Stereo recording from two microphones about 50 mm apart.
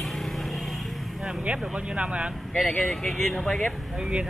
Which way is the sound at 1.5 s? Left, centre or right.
Right.